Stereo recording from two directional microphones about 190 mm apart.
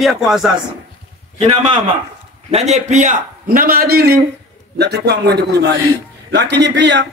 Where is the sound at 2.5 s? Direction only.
35° right (ahead or behind).